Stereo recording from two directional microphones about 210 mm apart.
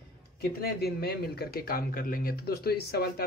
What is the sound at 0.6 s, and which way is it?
A man's voice, 50° left (ahead or behind).